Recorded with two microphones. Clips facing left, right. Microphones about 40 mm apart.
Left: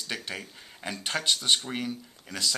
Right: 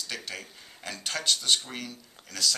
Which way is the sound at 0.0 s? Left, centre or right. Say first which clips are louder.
Left 2 dB; centre.